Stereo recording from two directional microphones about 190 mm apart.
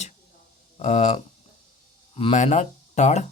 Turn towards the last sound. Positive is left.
turn(degrees=35)  # may be behind; listen again after turning